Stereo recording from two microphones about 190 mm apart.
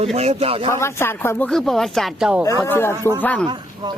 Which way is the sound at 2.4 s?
15° left (ahead or behind).